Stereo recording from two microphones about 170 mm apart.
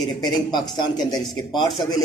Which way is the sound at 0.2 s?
25° left (ahead or behind).